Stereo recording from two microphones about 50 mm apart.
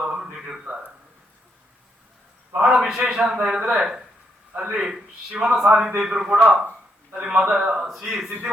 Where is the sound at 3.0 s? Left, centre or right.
Centre.